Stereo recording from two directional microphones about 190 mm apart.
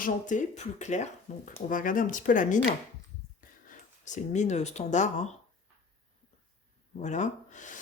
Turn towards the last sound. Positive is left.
turn(degrees=40)  # may be behind; listen again after turning